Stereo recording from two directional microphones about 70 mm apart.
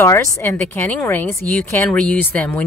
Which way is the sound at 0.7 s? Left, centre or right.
Left.